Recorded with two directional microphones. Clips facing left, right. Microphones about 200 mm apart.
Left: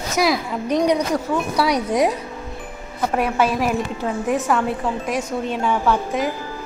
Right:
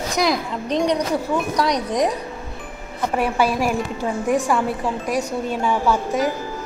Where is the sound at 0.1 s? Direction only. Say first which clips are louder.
Left 2 dB; 5° left (ahead or behind).